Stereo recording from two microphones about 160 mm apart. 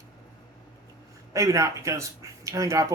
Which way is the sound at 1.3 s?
20° right (ahead or behind).